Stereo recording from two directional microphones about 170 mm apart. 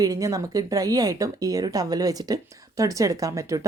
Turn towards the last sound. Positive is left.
turn(degrees=-20)  # may be behind; listen again after turning